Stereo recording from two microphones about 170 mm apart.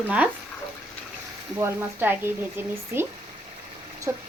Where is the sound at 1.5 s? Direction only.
15° right (ahead or behind).